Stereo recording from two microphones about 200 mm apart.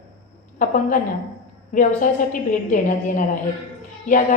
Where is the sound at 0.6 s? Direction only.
40° left (ahead or behind).